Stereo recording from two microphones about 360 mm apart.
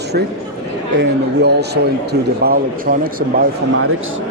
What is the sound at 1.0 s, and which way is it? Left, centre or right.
Speech, right.